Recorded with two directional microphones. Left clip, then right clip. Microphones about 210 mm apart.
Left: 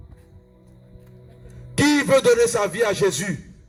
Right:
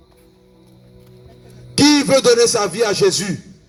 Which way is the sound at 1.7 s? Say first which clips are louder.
Right 4 dB; 35° right (ahead or behind).